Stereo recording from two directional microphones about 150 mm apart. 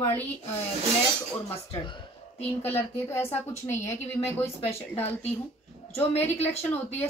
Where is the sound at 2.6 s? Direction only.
15° left (ahead or behind).